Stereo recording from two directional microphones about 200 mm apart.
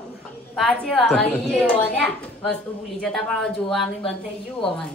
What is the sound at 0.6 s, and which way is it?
Speech, 5° left (ahead or behind).